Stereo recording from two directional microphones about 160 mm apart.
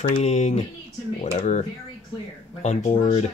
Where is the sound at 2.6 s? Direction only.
55° left (ahead or behind).